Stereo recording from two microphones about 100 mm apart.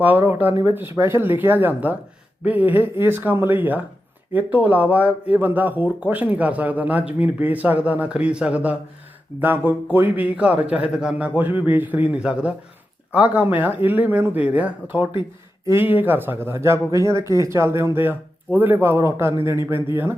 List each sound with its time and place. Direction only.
0.0 s speech: 20° right (ahead or behind)